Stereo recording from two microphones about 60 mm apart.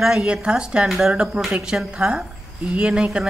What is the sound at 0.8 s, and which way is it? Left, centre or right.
Speech, centre.